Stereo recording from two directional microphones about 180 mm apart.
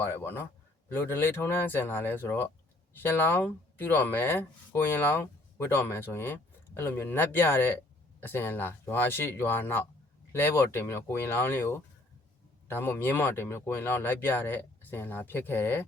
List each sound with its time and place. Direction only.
0.0 s speech: 10° left (ahead or behind)